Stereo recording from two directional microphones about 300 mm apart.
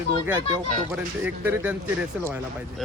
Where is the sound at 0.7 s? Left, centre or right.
Centre.